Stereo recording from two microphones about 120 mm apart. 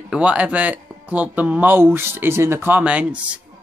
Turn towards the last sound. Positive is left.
turn(degrees=-10)  # may be behind; listen again after turning